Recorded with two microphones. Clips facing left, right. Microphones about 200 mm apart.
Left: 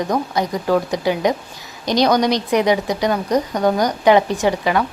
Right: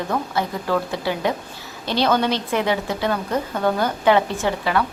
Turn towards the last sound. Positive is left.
turn(degrees=15)  # may be behind; listen again after turning